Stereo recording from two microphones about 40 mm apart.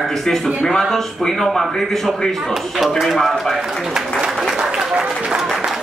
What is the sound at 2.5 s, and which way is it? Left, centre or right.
Speech, centre.